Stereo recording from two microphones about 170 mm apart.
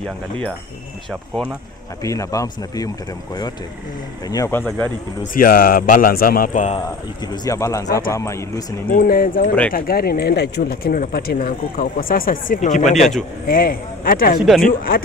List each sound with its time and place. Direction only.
2.0 s speech: 20° left (ahead or behind)
4.3 s speech: 15° left (ahead or behind)
5.3 s speech: 55° left (ahead or behind)
7.4 s speech: 20° left (ahead or behind)
8.9 s speech: 55° left (ahead or behind)
13.5 s speech: 55° left (ahead or behind)